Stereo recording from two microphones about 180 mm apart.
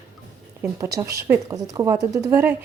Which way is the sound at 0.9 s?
15° right (ahead or behind).